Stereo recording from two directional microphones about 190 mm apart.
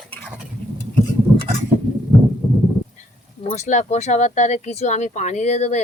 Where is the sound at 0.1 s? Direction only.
5° left (ahead or behind).